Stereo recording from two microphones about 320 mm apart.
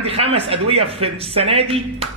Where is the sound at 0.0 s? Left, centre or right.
Centre.